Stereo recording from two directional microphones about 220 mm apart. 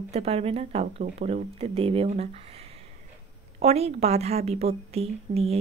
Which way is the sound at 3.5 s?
30° right (ahead or behind).